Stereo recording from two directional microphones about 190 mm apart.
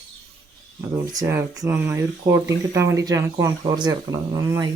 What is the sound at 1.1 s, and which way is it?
Speech, 15° right (ahead or behind).